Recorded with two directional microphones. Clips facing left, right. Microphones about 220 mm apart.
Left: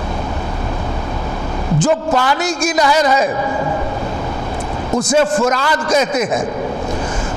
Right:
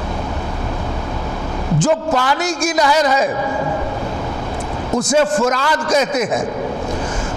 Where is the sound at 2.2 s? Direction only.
10° left (ahead or behind).